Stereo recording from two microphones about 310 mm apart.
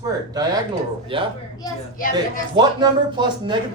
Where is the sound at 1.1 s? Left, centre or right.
Centre.